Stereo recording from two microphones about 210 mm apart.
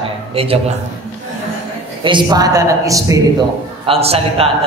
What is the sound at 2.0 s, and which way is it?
A woman's voice, 20° right (ahead or behind).